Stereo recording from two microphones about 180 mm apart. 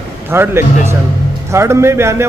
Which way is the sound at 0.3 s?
15° right (ahead or behind).